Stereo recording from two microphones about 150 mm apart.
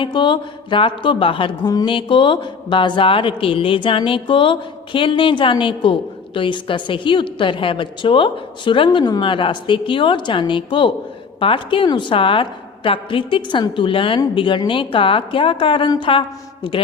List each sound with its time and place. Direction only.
0.0 s speech: 30° left (ahead or behind)